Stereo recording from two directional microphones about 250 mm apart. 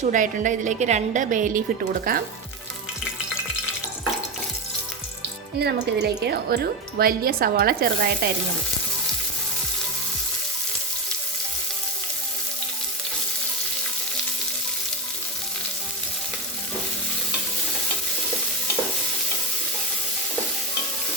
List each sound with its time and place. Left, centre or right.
0.0 s a woman's voice: right
5.5 s a woman's voice: right